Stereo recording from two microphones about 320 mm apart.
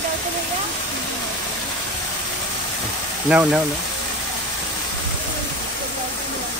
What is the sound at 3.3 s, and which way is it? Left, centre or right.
Speech, centre.